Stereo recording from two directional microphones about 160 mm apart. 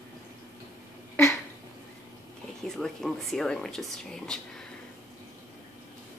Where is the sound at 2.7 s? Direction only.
Centre (ahead or behind).